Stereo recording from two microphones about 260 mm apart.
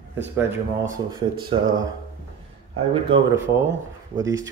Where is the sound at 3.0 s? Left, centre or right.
Centre.